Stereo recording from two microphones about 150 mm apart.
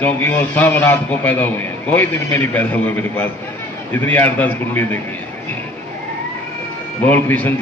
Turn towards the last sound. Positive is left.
turn(degrees=15)  # may be behind; listen again after turning